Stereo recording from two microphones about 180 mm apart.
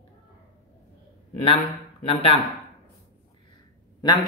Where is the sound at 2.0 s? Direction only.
35° left (ahead or behind).